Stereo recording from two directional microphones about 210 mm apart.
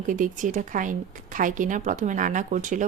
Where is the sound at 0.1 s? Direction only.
40° right (ahead or behind).